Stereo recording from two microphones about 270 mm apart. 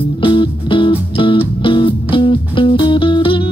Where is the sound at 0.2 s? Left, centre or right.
Centre.